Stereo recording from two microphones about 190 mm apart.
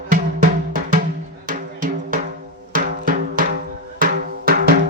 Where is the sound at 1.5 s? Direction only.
45° right (ahead or behind).